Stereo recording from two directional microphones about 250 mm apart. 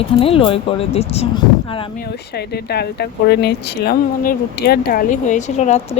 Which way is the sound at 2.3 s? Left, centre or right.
Left.